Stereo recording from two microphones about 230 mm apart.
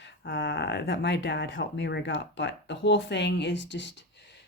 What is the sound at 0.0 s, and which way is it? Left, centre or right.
Speech, left.